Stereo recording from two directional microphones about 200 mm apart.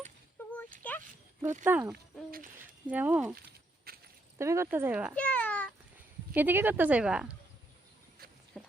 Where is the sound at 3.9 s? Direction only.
50° right (ahead or behind).